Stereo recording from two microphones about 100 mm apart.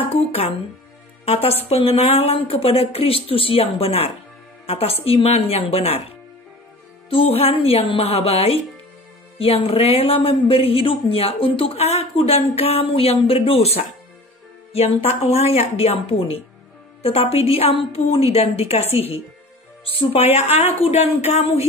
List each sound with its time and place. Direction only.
0.1 s a woman's voice: 85° left
7.1 s speech: 70° left (ahead or behind); by 8.5 s 90° left
9.4 s a woman's voice: 70° left (ahead or behind); by 19.2 s 90° left
19.8 s a woman's voice: 65° left (ahead or behind)
20.3 s speech: 90° left